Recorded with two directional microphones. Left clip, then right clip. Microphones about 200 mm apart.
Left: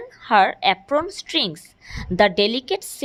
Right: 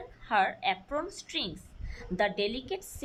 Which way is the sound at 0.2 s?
50° left (ahead or behind).